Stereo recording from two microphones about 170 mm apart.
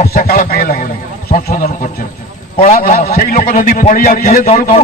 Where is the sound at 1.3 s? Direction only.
50° left (ahead or behind).